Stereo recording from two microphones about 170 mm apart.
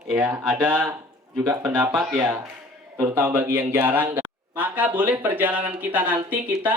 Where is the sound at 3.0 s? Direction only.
20° right (ahead or behind).